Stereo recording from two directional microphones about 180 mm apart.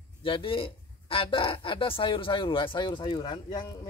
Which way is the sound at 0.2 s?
30° left (ahead or behind).